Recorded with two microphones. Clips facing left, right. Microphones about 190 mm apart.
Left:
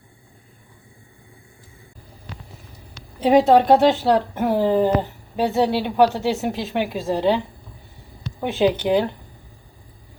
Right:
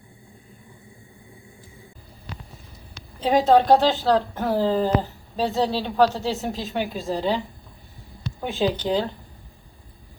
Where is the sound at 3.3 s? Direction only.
20° left (ahead or behind).